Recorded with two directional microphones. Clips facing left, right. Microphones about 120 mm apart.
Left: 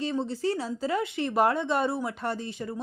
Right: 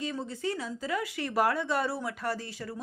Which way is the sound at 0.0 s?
30° left (ahead or behind).